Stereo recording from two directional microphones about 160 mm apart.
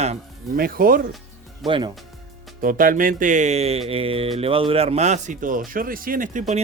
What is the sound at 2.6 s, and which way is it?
Speech, 60° right (ahead or behind).